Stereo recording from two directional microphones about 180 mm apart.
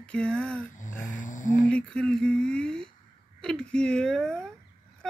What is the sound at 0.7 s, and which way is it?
Music, 45° left (ahead or behind).